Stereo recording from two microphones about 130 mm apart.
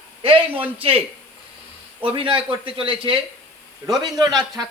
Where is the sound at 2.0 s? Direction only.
45° right (ahead or behind).